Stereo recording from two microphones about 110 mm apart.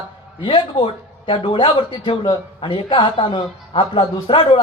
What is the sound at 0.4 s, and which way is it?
A man's voice, 50° left (ahead or behind).